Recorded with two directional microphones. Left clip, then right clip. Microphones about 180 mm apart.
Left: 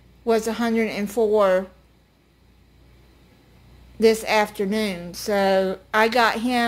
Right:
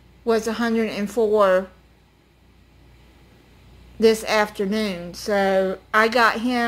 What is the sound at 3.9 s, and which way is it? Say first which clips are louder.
A woman's voice: even; 10° left (ahead or behind).